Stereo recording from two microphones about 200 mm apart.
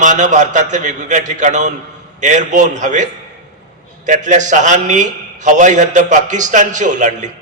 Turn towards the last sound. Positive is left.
turn(degrees=-40)  # may be behind; listen again after turning